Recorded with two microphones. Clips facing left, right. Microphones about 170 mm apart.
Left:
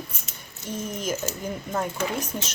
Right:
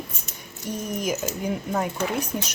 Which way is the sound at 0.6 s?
15° right (ahead or behind).